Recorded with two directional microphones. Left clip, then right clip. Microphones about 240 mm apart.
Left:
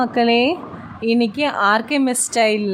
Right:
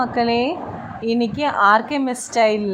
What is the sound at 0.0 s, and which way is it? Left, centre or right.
A woman's voice, centre.